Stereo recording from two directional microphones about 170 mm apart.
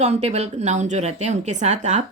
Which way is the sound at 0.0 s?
40° right (ahead or behind).